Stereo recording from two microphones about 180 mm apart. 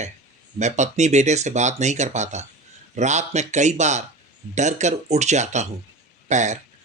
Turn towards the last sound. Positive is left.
turn(degrees=-40)  # may be behind; listen again after turning